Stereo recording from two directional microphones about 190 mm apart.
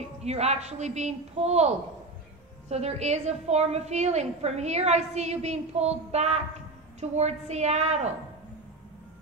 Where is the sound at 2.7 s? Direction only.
35° right (ahead or behind).